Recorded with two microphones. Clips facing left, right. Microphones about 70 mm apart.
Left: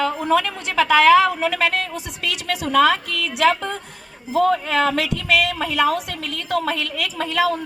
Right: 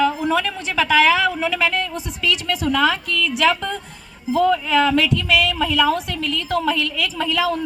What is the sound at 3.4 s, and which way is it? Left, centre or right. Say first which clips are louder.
A woman's voice: left 3 dB; left.